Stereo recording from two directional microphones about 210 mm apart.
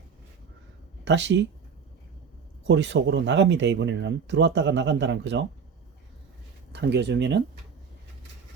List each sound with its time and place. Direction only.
1.0 s speech: 55° right (ahead or behind)
2.6 s speech: 60° right (ahead or behind)
6.7 s speech: 55° right (ahead or behind)